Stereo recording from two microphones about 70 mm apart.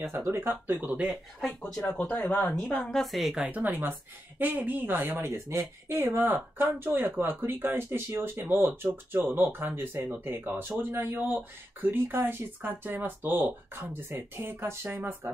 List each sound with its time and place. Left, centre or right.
0.1 s speech: right
1.5 s speech: centre
2.0 s speech: left
2.6 s speech: centre
3.4 s speech: right
6.1 s speech: right